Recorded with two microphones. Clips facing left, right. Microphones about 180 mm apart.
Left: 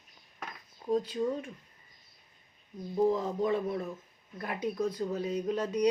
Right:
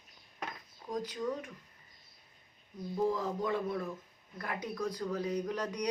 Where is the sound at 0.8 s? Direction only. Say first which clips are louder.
Left 6 dB; 25° left (ahead or behind).